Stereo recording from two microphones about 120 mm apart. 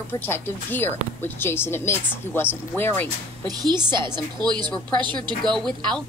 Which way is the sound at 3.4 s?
35° right (ahead or behind).